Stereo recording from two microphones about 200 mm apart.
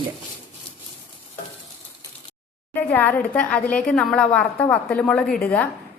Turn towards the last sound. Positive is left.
turn(degrees=5)  # may be behind; listen again after turning